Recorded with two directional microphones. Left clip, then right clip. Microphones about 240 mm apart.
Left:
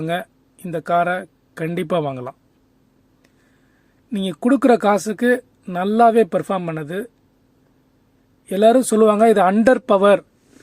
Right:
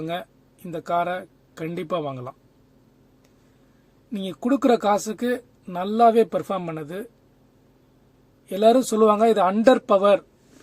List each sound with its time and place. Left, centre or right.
0.0 s speech: left
4.1 s speech: left
8.4 s speech: left